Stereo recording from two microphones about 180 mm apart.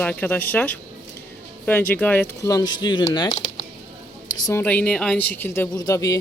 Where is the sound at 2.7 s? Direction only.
25° left (ahead or behind).